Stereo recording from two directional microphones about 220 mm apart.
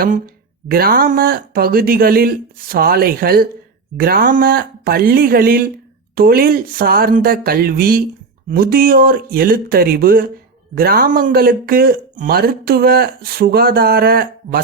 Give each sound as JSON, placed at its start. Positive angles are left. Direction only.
{"t": 0.7, "sound": "speech", "side_deg": -45}